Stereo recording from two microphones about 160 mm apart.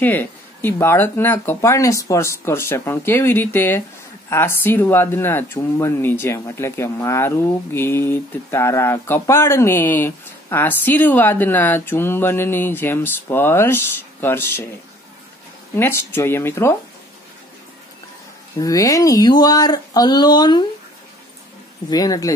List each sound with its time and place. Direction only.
0.0 s speech: 10° left (ahead or behind)
15.7 s speech: 15° left (ahead or behind)
18.6 s speech: 20° left (ahead or behind)
21.9 s speech: 20° left (ahead or behind)